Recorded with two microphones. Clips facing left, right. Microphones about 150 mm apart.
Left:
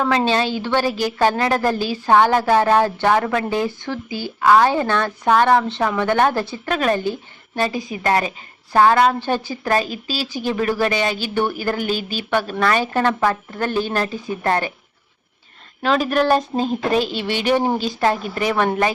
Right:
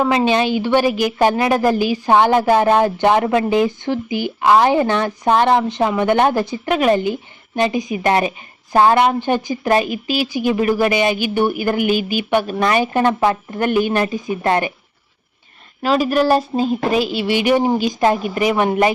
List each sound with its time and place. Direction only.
0.0 s a woman's voice: 15° right (ahead or behind)
15.8 s a woman's voice: 5° right (ahead or behind)